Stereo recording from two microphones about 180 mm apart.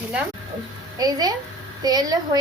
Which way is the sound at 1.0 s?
20° right (ahead or behind).